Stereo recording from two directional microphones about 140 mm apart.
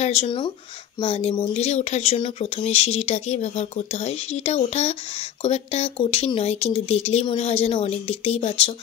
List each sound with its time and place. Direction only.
0.0 s a sound: 50° left (ahead or behind)
1.0 s speech: 40° left (ahead or behind)
1.6 s speech: 50° left (ahead or behind)